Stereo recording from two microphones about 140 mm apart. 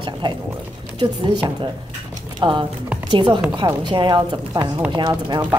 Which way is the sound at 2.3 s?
35° right (ahead or behind).